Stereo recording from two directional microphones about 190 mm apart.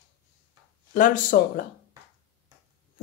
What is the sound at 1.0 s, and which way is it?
Speech, 45° left (ahead or behind).